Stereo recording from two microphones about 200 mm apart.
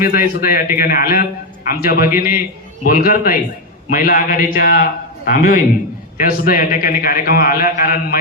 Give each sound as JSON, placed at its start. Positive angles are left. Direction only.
{"t": 0.0, "sound": "a man's voice", "side_deg": 45}